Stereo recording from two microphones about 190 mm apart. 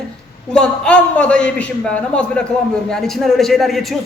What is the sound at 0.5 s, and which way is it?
A man's voice, 5° left (ahead or behind).